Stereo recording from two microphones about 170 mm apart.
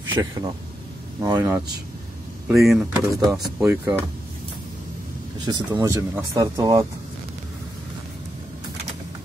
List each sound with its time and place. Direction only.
0.2 s speech: 15° right (ahead or behind)
2.4 s speech: centre (ahead or behind)
2.9 s speech: 20° right (ahead or behind)
3.3 s speech: 5° right (ahead or behind)
5.4 s speech: 25° right (ahead or behind)